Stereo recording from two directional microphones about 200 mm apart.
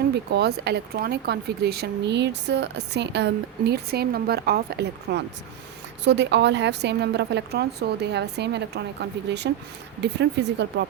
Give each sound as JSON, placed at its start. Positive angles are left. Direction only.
{"t": 0.1, "sound": "speech", "side_deg": -55}